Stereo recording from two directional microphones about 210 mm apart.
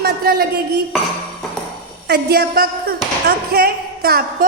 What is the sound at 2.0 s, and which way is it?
A woman's voice, 50° right (ahead or behind).